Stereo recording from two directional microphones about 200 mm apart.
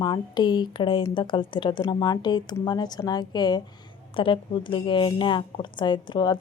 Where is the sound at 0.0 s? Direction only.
20° left (ahead or behind).